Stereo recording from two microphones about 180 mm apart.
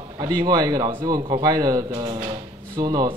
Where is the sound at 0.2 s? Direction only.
25° right (ahead or behind).